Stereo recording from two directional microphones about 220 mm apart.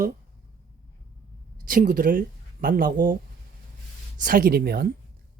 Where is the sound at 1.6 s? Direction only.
40° right (ahead or behind).